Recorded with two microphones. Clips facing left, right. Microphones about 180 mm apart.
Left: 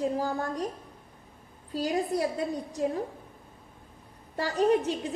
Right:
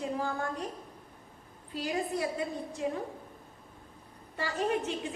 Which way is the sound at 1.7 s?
40° left (ahead or behind).